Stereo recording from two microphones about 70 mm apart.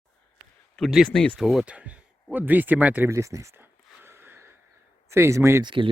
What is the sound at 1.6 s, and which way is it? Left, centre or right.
Speech, centre.